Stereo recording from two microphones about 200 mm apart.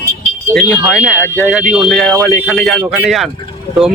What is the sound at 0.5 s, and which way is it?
Speech, 5° left (ahead or behind).